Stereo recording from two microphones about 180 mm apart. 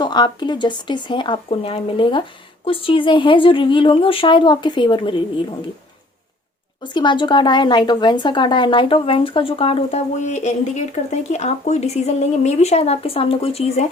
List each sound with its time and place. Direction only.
0.0 s speech: 25° left (ahead or behind)
6.8 s a woman's voice: 25° left (ahead or behind)